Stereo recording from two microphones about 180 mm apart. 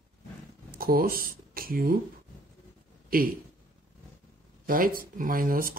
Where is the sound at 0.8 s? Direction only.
55° right (ahead or behind).